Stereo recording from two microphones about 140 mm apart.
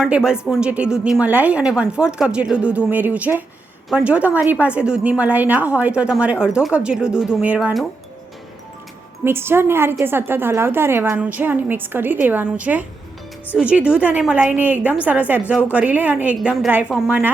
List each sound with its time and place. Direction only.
0.0 s a woman's voice: 5° right (ahead or behind)
9.2 s a woman's voice: 15° right (ahead or behind)